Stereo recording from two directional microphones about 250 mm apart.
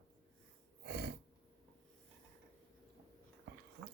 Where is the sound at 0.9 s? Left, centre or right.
Right.